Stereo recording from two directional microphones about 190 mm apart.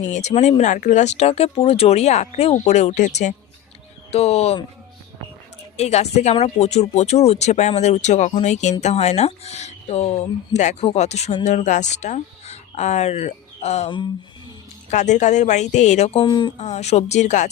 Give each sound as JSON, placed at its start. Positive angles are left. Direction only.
{"t": 0.0, "sound": "speech", "side_deg": 35}
{"t": 5.7, "sound": "speech", "side_deg": 35}
{"t": 14.8, "sound": "speech", "side_deg": 40}
{"t": 16.2, "sound": "speech", "side_deg": 25}
{"t": 16.6, "sound": "speech", "side_deg": 35}